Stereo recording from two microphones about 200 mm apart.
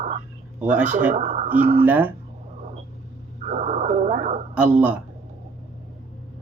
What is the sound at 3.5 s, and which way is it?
Radio, 35° right (ahead or behind).